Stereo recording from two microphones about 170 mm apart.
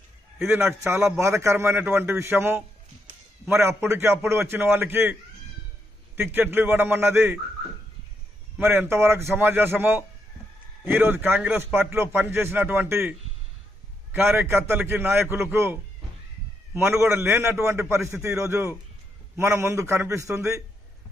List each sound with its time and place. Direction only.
0.4 s a man's voice: 15° right (ahead or behind)
6.1 s a man's voice: 15° right (ahead or behind)
8.5 s a man's voice: 10° right (ahead or behind)